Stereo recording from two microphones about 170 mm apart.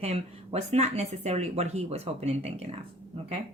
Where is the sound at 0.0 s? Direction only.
40° right (ahead or behind).